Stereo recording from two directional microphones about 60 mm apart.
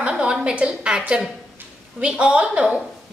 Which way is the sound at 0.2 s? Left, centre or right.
Centre.